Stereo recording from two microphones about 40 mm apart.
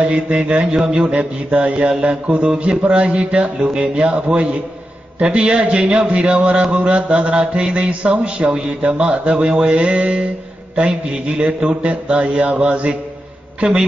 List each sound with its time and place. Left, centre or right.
0.5 s a man's voice: right
1.1 s speech: right
2.2 s mantra: right
2.9 s speech: right
10.8 s mantra: right
13.6 s a man's voice: centre